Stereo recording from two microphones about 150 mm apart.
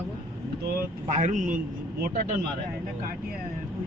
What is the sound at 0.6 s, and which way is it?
Speech, 55° right (ahead or behind).